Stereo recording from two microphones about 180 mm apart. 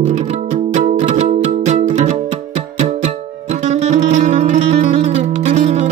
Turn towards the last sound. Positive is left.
turn(degrees=-40)  # may be behind; listen again after turning